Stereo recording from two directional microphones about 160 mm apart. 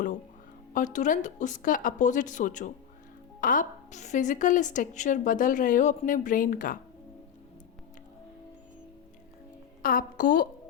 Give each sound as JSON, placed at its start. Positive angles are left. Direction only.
{"t": 0.7, "sound": "a woman's voice", "side_deg": 50}
{"t": 9.8, "sound": "a woman's voice", "side_deg": 65}